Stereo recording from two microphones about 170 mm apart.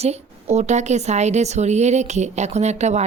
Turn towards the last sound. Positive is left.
turn(degrees=-40)  # may be behind; listen again after turning